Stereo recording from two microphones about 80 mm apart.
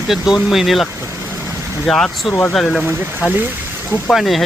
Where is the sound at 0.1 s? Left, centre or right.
Centre.